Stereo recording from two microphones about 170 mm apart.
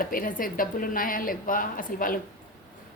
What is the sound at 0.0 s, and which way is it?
A woman's voice, 55° left (ahead or behind).